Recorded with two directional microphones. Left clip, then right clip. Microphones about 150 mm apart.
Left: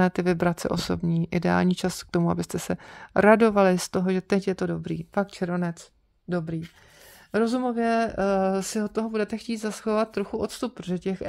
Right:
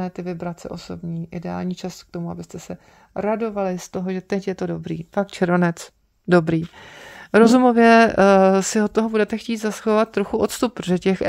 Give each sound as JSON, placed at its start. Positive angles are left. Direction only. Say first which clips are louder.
{"t": 0.0, "sound": "speech", "louder": "left 6 dB", "side_deg": 30}
{"t": 2.1, "sound": "speech", "louder": "left 6 dB", "side_deg": 40}
{"t": 5.3, "sound": "speech", "louder": "right 10 dB", "side_deg": -30}
{"t": 6.2, "sound": "speech", "louder": "right 13 dB", "side_deg": -55}
{"t": 7.2, "sound": "speech", "louder": "right 11 dB", "side_deg": -40}